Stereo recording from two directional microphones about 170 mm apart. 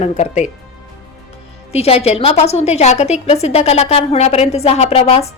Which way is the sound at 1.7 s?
35° left (ahead or behind).